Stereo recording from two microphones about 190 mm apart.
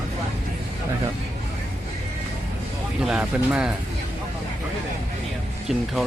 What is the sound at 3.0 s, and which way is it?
Speech, 5° right (ahead or behind).